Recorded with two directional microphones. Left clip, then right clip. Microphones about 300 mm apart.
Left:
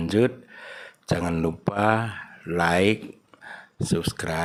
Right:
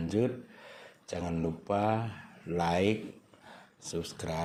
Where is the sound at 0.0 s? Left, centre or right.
Left.